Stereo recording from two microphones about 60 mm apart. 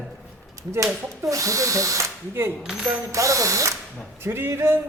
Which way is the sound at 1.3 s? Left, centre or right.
Right.